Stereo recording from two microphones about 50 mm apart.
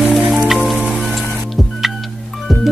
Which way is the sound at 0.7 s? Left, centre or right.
Right.